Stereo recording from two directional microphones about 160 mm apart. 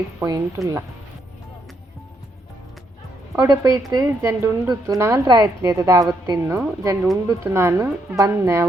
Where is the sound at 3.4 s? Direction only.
20° right (ahead or behind).